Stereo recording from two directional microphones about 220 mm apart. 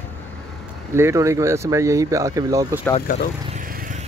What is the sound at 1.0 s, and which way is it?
Speech, 10° right (ahead or behind).